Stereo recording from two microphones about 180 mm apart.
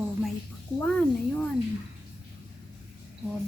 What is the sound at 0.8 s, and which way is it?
Speech, 10° left (ahead or behind).